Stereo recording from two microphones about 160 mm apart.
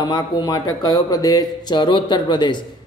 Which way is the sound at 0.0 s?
25° left (ahead or behind).